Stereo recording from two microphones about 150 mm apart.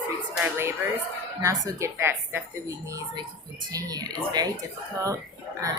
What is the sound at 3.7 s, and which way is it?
Speech, 25° right (ahead or behind).